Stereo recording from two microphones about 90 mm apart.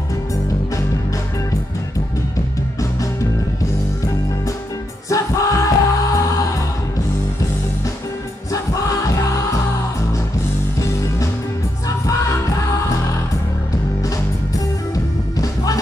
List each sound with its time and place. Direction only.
5.1 s music: 35° left (ahead or behind)
8.8 s music: 35° left (ahead or behind)
15.3 s music: 40° left (ahead or behind)